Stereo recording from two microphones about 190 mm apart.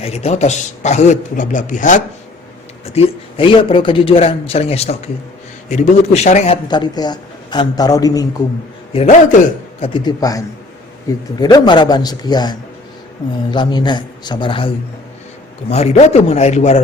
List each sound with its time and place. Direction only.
0.0 s a man's voice: 35° left (ahead or behind)
2.8 s a man's voice: 30° left (ahead or behind)
6.7 s speech: 20° left (ahead or behind)
8.9 s a man's voice: 35° left (ahead or behind)
9.8 s speech: 25° left (ahead or behind)
15.7 s a man's voice: 35° left (ahead or behind)